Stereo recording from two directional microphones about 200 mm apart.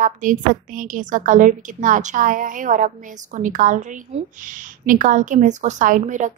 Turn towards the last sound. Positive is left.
turn(degrees=-40)  # may be behind; listen again after turning